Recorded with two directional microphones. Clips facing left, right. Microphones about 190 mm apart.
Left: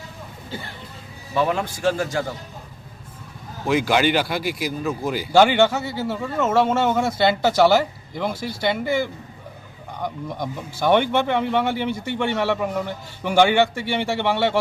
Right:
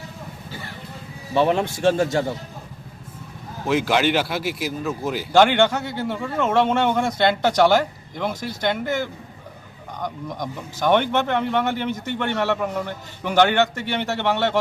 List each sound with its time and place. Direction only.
1.3 s a man's voice: 25° right (ahead or behind)
3.7 s speech: centre (ahead or behind)